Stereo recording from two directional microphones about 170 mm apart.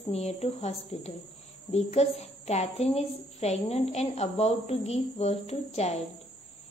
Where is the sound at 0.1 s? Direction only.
40° left (ahead or behind).